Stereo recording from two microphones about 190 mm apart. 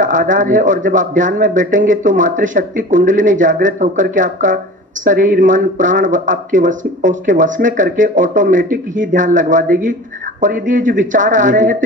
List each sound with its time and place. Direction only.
0.0 s speech: 45° right (ahead or behind)